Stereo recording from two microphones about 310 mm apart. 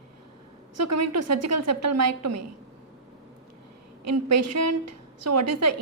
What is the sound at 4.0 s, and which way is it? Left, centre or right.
A woman's voice, right.